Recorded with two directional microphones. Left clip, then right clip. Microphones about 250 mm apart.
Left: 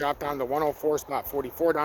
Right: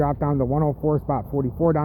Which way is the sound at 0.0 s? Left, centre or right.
Centre.